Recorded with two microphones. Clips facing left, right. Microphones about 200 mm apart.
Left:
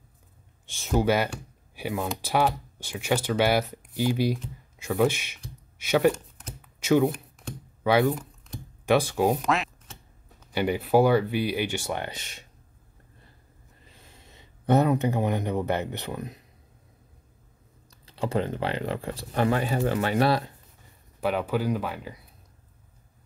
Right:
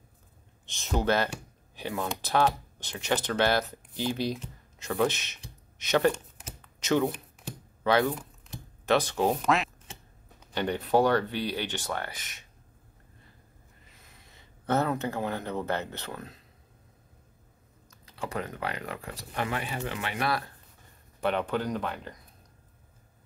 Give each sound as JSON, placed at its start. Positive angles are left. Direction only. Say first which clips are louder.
{"t": 0.7, "sound": "speech", "louder": "left 4 dB", "side_deg": 10}
{"t": 6.6, "sound": "a sound", "louder": "left 4 dB", "side_deg": 10}
{"t": 7.8, "sound": "speech", "louder": "left 3 dB", "side_deg": 10}
{"t": 9.4, "sound": "quack", "louder": "even", "side_deg": 0}
{"t": 10.5, "sound": "speech", "louder": "left 3 dB", "side_deg": 10}
{"t": 13.8, "sound": "speech", "louder": "left 6 dB", "side_deg": 30}
{"t": 17.8, "sound": "speech", "louder": "left 7 dB", "side_deg": 30}
{"t": 21.2, "sound": "speech", "louder": "left 2 dB", "side_deg": 5}